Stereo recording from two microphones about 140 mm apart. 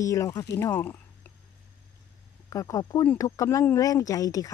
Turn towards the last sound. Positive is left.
turn(degrees=25)  # may be behind; listen again after turning